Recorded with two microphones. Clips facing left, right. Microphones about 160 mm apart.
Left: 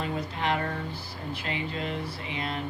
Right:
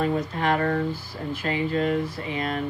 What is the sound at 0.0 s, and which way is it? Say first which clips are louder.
Speech: right 6 dB; 50° right (ahead or behind).